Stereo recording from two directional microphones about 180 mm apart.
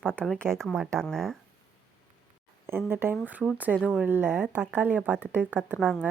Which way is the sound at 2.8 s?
10° right (ahead or behind).